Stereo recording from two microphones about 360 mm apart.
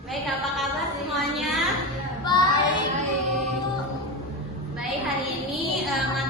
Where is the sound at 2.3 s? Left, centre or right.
Centre.